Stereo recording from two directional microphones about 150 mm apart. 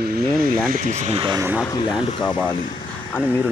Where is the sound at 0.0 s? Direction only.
85° right.